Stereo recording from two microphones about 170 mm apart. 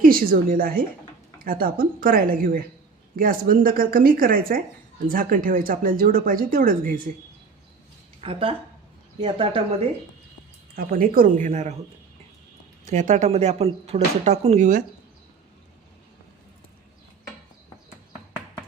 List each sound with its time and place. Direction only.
0.0 s speech: 55° right (ahead or behind)
8.2 s speech: 35° right (ahead or behind)
10.8 s speech: 60° right (ahead or behind)
12.8 s speech: 45° right (ahead or behind)